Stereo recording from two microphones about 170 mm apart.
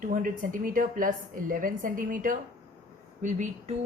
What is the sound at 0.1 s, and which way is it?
A woman's voice, 50° right (ahead or behind).